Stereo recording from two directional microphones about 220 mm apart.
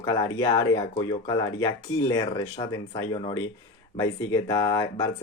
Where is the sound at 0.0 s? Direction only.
15° left (ahead or behind).